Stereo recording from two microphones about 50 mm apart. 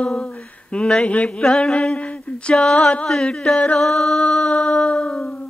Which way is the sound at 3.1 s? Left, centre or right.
Centre.